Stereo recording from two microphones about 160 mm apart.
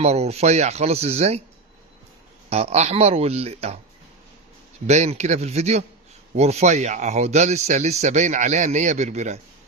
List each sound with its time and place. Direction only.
0.0 s speech: 40° right (ahead or behind)
2.5 s speech: 40° right (ahead or behind)
4.9 s speech: 45° right (ahead or behind)